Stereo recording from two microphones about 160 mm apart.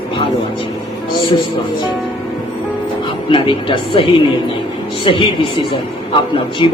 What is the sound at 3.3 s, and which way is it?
A man's voice, 30° left (ahead or behind).